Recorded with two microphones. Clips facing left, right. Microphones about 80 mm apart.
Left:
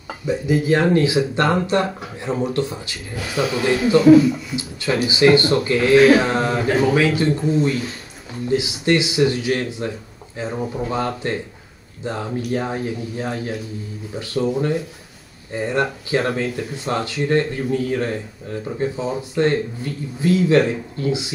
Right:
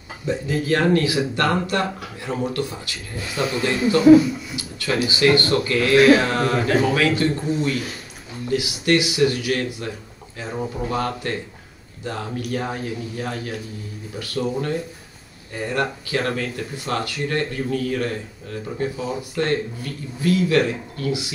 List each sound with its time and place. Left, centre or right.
0.3 s speech: centre